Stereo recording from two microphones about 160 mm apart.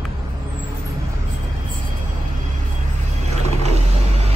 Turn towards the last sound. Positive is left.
turn(degrees=-40)  # may be behind; listen again after turning